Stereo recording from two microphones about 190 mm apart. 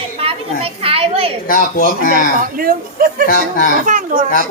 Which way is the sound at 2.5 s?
50° right (ahead or behind).